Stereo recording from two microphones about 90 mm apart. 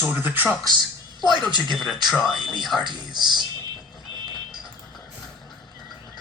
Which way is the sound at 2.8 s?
55° right (ahead or behind).